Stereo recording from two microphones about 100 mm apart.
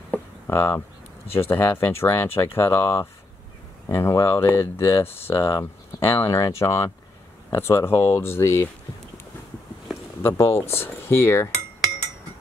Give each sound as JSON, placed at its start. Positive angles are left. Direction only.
{"t": 0.1, "sound": "a sound", "side_deg": 20}
{"t": 1.3, "sound": "speech", "side_deg": 20}
{"t": 10.2, "sound": "speech", "side_deg": 25}